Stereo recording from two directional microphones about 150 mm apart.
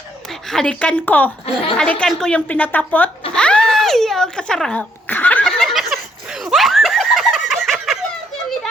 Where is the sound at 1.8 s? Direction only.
5° left (ahead or behind).